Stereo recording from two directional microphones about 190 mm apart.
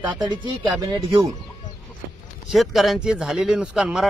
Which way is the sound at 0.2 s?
20° right (ahead or behind).